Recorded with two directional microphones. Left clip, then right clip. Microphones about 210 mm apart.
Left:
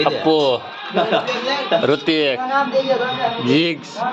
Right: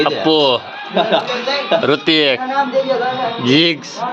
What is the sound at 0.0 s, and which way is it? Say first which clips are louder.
Speech: right 2 dB; 5° right (ahead or behind).